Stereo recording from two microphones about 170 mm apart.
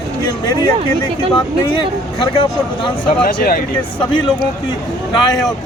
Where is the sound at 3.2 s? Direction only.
60° left (ahead or behind).